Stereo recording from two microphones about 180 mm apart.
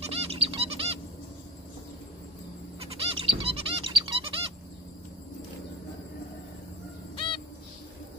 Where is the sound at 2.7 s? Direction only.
35° right (ahead or behind).